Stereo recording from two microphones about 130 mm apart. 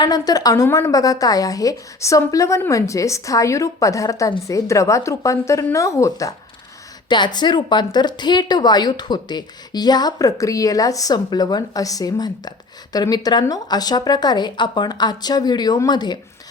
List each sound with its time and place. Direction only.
0.0 s a woman's voice: 30° left (ahead or behind)